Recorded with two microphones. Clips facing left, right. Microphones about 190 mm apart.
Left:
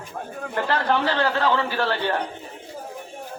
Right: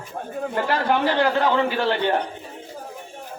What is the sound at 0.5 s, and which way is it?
A man's voice, 10° right (ahead or behind).